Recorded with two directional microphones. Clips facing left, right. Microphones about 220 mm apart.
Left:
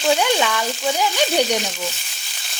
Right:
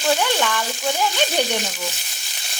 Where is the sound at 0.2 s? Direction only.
10° left (ahead or behind).